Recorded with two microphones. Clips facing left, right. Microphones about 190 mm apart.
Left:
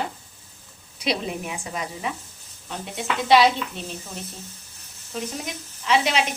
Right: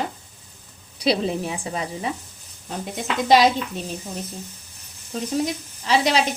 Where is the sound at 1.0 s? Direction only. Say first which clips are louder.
Right 5 dB; 35° right (ahead or behind).